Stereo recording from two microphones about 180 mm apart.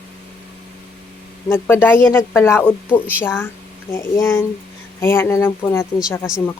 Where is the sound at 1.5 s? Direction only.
15° left (ahead or behind).